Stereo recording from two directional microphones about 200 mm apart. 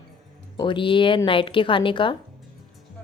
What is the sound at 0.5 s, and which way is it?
Speech, 25° left (ahead or behind).